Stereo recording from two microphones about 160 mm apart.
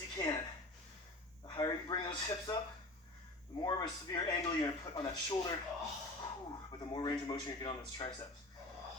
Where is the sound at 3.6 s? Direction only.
25° left (ahead or behind).